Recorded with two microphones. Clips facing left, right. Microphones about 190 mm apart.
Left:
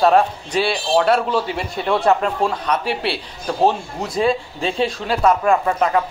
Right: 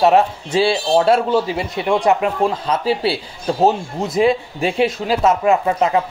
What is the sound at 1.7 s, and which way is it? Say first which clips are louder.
Speech: right 1 dB; 15° right (ahead or behind).